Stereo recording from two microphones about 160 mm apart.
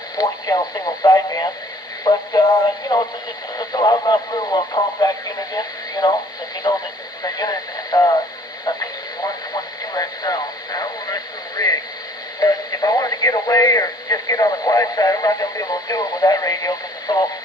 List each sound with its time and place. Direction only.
0.2 s speech: 25° left (ahead or behind)
8.6 s radio: 20° left (ahead or behind)
12.4 s speech: 20° left (ahead or behind)